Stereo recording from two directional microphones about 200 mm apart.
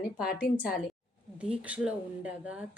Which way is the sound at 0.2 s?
45° left (ahead or behind).